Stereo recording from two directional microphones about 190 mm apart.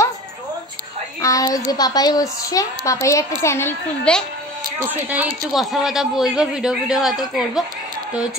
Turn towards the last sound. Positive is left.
turn(degrees=0)  # may be behind; listen again after turning